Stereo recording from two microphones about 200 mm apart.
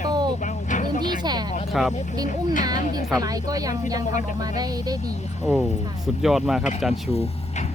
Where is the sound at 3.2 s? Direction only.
20° right (ahead or behind).